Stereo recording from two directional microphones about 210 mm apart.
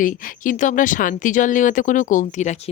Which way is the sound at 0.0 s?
40° left (ahead or behind).